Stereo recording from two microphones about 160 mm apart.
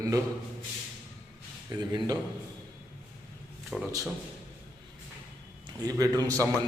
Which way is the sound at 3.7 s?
Centre (ahead or behind).